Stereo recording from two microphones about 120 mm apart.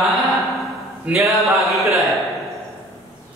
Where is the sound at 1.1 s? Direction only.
10° right (ahead or behind).